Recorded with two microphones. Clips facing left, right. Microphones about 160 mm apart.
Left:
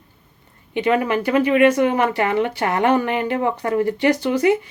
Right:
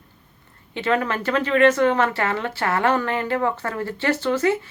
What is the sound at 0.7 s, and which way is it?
Speech, 15° left (ahead or behind).